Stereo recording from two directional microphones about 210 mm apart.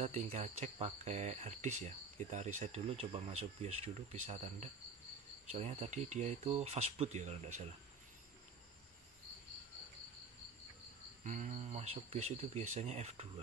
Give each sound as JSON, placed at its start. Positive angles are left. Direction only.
{"t": 0.0, "sound": "speech", "side_deg": -30}
{"t": 11.2, "sound": "speech", "side_deg": -35}